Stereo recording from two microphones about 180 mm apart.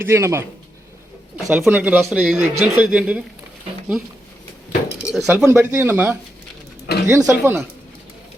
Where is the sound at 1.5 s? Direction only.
5° right (ahead or behind).